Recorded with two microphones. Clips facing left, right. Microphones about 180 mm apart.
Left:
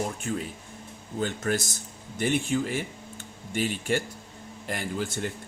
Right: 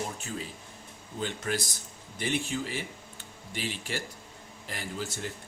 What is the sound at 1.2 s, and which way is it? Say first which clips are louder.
Speech: left 4 dB; 45° left (ahead or behind).